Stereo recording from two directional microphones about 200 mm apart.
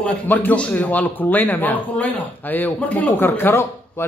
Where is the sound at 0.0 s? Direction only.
10° left (ahead or behind).